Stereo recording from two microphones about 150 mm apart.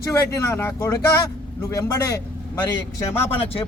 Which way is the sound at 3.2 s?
40° left (ahead or behind).